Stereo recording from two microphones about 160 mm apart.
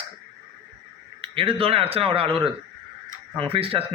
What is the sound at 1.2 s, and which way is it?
A man's voice, 35° right (ahead or behind).